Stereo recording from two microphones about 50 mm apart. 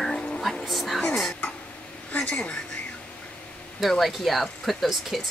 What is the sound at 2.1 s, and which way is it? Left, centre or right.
Speech, left.